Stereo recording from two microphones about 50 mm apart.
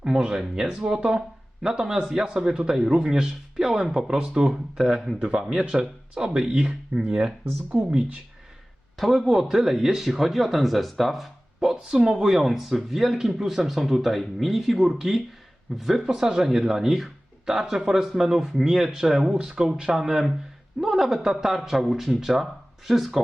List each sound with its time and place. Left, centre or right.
0.0 s speech: centre
9.0 s speech: centre